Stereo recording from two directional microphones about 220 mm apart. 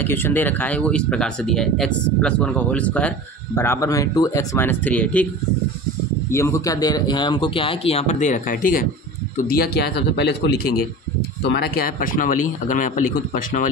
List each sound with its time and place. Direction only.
0.0 s speech: 10° left (ahead or behind)
6.3 s speech: 15° left (ahead or behind); by 13.7 s 35° left (ahead or behind)